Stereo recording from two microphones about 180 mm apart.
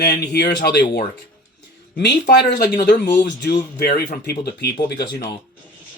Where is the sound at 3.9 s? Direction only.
60° left (ahead or behind).